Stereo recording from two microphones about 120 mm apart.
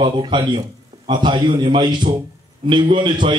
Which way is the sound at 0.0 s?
40° right (ahead or behind).